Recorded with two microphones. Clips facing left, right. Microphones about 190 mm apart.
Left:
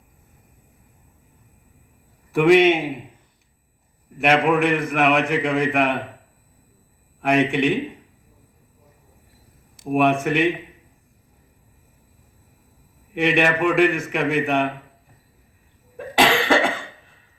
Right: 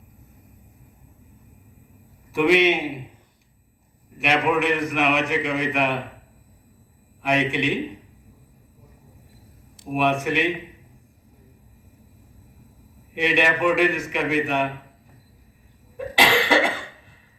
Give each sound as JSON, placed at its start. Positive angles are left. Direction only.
{"t": 2.3, "sound": "a man's voice", "side_deg": 50}
{"t": 4.2, "sound": "a man's voice", "side_deg": 50}
{"t": 7.2, "sound": "a man's voice", "side_deg": 50}
{"t": 9.9, "sound": "a man's voice", "side_deg": 50}
{"t": 13.1, "sound": "a man's voice", "side_deg": 50}
{"t": 16.0, "sound": "cough", "side_deg": 50}